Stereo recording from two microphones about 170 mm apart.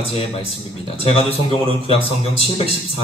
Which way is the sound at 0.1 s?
35° left (ahead or behind).